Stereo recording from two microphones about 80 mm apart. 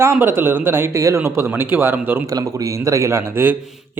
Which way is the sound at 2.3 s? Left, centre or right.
Right.